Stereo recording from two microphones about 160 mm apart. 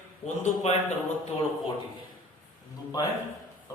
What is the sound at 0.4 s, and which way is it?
Speech, 45° left (ahead or behind).